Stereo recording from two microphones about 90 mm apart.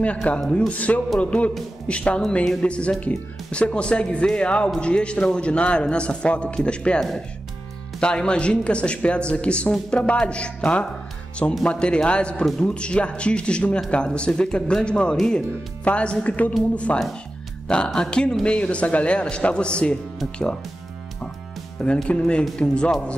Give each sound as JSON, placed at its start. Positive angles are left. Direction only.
{"t": 0.0, "sound": "speech", "side_deg": 15}
{"t": 21.8, "sound": "speech", "side_deg": 10}